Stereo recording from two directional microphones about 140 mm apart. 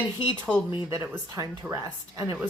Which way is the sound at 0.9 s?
25° right (ahead or behind).